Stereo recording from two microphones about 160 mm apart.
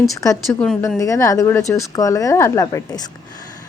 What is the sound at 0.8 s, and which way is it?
Speech, 20° left (ahead or behind).